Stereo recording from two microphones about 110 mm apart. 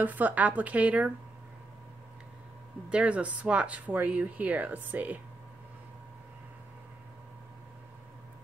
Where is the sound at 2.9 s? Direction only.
10° right (ahead or behind).